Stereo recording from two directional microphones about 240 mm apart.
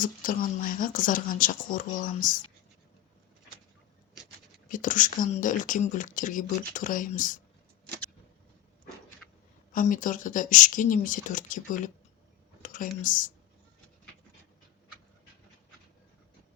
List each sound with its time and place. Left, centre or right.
0.0 s speech: left
4.7 s speech: left
9.7 s speech: left